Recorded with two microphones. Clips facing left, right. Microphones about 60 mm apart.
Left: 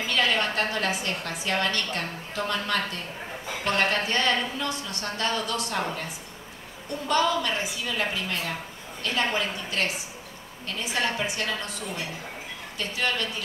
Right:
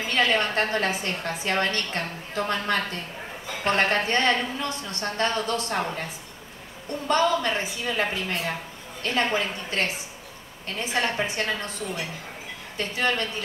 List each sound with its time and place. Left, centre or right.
0.0 s a woman's voice: right